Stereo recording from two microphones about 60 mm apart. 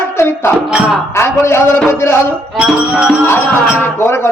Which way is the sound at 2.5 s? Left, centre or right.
Centre.